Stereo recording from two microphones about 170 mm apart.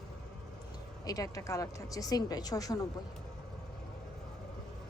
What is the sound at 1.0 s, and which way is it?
A woman's voice, 20° left (ahead or behind).